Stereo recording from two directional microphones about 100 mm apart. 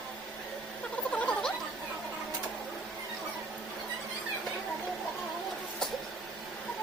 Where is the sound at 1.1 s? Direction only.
10° left (ahead or behind).